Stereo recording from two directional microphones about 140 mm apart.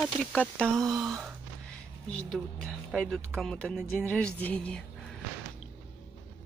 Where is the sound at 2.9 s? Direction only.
Centre (ahead or behind).